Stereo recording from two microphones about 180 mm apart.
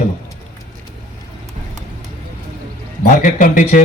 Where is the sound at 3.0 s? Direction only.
45° left (ahead or behind).